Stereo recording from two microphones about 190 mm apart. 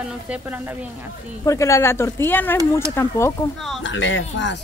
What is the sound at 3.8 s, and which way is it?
Speech, 75° left (ahead or behind).